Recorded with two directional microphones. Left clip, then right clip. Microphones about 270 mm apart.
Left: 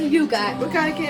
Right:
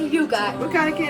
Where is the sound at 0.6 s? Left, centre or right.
Centre.